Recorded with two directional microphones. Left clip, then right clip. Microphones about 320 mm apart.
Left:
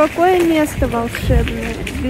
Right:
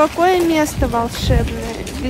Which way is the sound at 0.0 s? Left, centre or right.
Left.